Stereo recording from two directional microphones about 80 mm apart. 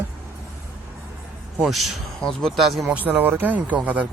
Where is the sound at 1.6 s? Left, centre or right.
Centre.